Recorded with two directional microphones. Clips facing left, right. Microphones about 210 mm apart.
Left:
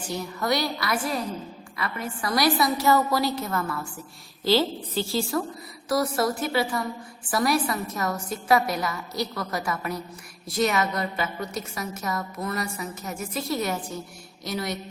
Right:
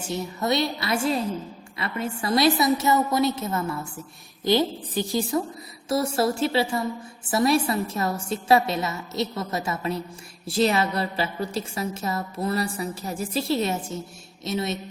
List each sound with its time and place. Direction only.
0.0 s a woman's voice: 25° right (ahead or behind)